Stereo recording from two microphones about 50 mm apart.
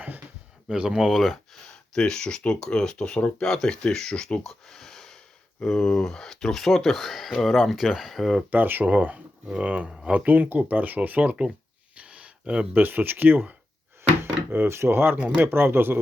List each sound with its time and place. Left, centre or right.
0.7 s speech: centre
1.9 s speech: centre
4.4 s speech: centre
8.4 s speech: right
11.9 s a sound: right
12.7 s speech: right
14.5 s speech: right